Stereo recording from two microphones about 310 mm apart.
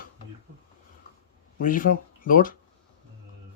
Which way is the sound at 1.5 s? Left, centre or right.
Left.